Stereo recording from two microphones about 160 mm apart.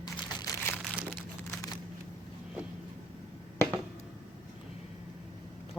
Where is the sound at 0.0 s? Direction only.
25° left (ahead or behind).